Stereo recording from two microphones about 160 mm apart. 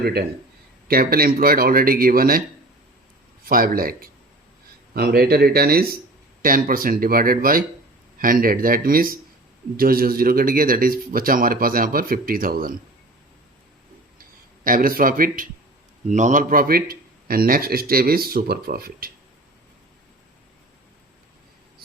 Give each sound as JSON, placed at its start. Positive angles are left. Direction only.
{"t": 0.0, "sound": "a man's voice", "side_deg": -75}
{"t": 3.4, "sound": "a man's voice", "side_deg": -65}
{"t": 6.4, "sound": "speech", "side_deg": -60}
{"t": 14.6, "sound": "speech", "side_deg": -60}
{"t": 16.0, "sound": "a man's voice", "side_deg": -50}